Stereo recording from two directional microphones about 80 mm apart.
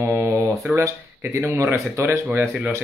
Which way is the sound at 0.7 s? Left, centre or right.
Right.